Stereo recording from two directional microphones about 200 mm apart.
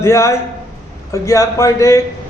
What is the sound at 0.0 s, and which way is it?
Speech, 15° left (ahead or behind).